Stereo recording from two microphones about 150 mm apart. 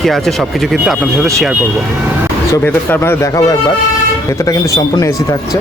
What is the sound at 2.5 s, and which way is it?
Speech, 15° left (ahead or behind).